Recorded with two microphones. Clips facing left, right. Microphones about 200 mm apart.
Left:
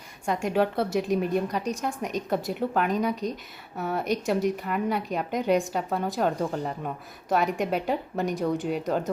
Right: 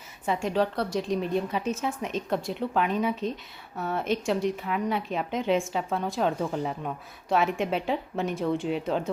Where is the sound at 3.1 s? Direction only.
40° left (ahead or behind).